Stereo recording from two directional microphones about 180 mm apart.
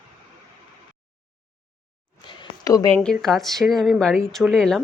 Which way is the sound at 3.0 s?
5° left (ahead or behind).